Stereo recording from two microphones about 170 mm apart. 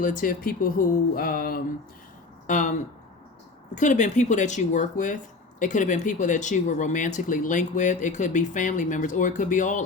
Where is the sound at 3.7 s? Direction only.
45° left (ahead or behind).